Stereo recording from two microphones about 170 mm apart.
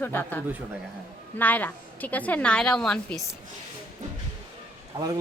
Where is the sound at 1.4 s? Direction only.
10° left (ahead or behind).